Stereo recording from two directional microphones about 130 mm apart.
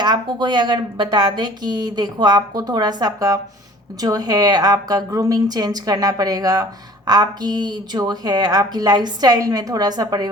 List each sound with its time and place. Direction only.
0.0 s a woman's voice: 35° right (ahead or behind)